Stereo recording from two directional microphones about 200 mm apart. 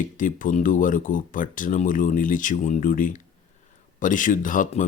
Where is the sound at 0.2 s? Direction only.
40° left (ahead or behind).